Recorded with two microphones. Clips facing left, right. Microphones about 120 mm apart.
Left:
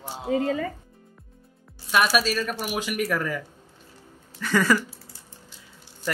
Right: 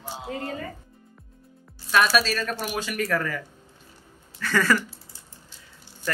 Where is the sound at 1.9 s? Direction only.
10° left (ahead or behind).